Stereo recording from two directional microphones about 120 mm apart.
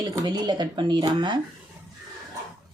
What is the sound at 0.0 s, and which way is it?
Speech, 35° right (ahead or behind).